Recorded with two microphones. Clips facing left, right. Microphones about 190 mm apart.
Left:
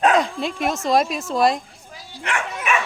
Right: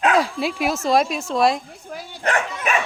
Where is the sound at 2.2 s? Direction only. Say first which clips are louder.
Right 2 dB; 40° right (ahead or behind).